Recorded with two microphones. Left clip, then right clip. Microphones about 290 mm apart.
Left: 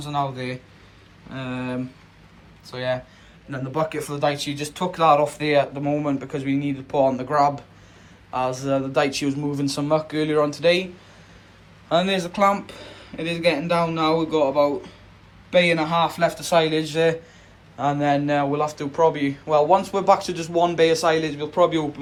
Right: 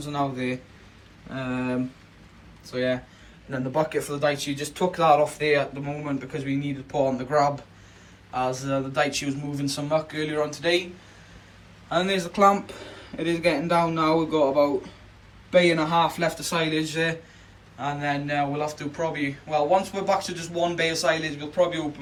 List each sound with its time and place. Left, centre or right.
0.0 s speech: centre
11.9 s speech: centre
15.7 s speech: centre